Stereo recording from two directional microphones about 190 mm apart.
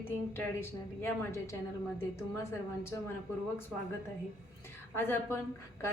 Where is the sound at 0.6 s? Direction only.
15° left (ahead or behind).